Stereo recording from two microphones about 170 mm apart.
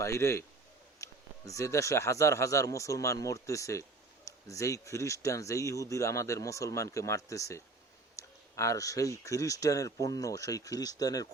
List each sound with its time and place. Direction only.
0.0 s speech: 15° left (ahead or behind)